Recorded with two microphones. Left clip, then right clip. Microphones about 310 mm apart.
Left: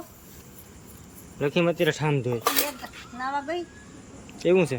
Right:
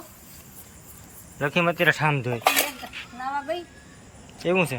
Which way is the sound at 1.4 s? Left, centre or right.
Centre.